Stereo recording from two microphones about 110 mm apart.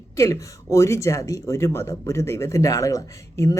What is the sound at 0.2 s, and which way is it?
Speech, 25° left (ahead or behind).